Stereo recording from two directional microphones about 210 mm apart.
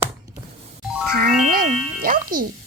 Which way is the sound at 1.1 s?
45° right (ahead or behind).